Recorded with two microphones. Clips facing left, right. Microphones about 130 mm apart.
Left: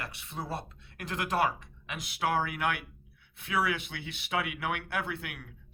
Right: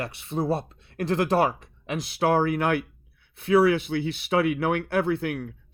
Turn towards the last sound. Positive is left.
turn(degrees=-40)  # may be behind; listen again after turning